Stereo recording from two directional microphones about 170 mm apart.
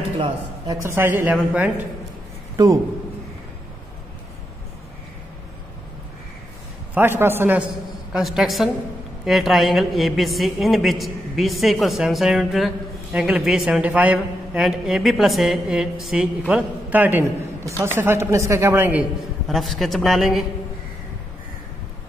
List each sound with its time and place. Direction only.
0.7 s speech: 15° right (ahead or behind)
2.5 s a man's voice: 20° right (ahead or behind)
6.9 s speech: 10° right (ahead or behind)
8.1 s a woman's voice: centre (ahead or behind)
19.4 s a woman's voice: centre (ahead or behind)